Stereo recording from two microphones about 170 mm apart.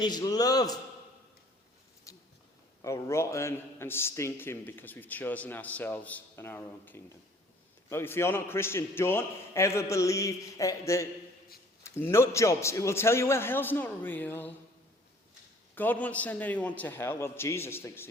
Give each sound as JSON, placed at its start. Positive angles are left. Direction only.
{"t": 0.0, "sound": "music", "side_deg": 25}
{"t": 2.1, "sound": "a sound", "side_deg": 20}
{"t": 2.8, "sound": "a man's voice", "side_deg": 15}
{"t": 9.9, "sound": "music", "side_deg": 20}
{"t": 11.8, "sound": "a man's voice", "side_deg": 15}
{"t": 15.7, "sound": "a man's voice", "side_deg": 10}